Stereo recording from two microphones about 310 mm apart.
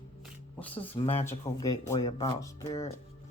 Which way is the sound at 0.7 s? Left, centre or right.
Centre.